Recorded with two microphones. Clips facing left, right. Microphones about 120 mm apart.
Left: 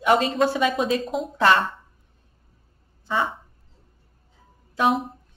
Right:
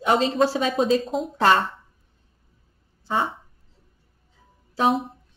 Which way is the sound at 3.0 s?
30° right (ahead or behind).